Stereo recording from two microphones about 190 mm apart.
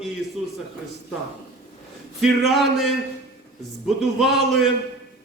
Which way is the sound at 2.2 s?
Centre (ahead or behind).